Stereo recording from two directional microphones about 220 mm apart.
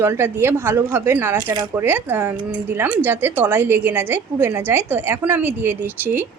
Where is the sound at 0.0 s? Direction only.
10° right (ahead or behind).